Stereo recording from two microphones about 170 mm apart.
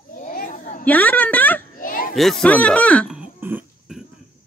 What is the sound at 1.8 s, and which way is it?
Children playing, 55° left (ahead or behind).